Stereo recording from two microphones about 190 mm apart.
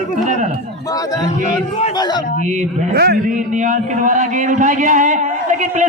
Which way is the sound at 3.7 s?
40° right (ahead or behind).